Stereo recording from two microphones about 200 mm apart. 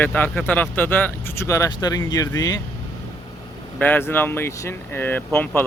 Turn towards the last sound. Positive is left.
turn(degrees=10)  # may be behind; listen again after turning